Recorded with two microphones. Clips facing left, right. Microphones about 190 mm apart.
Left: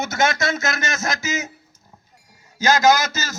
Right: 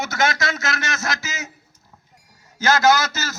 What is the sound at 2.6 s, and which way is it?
Speech, 15° left (ahead or behind).